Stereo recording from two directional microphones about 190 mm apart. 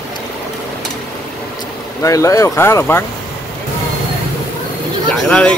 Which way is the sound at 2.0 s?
15° left (ahead or behind).